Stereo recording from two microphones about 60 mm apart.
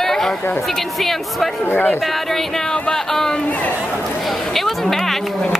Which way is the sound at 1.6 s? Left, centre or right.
Left.